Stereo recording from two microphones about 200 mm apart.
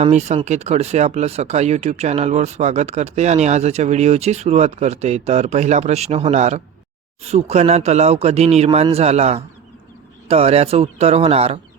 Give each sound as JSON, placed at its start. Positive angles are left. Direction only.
{"t": 0.0, "sound": "speech", "side_deg": -35}